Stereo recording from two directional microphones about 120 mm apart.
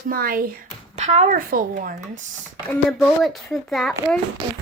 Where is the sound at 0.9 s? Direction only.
70° right (ahead or behind).